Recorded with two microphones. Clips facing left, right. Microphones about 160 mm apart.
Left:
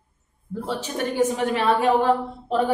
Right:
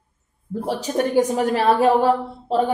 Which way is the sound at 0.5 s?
40° right (ahead or behind).